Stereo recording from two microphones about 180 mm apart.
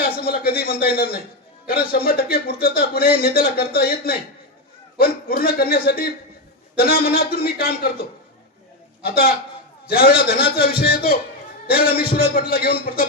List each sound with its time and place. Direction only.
0.0 s speech: 60° left (ahead or behind)
9.0 s speech: 55° left (ahead or behind)